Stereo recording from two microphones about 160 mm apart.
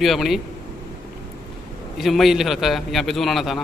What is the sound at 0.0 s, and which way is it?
Speech, centre (ahead or behind).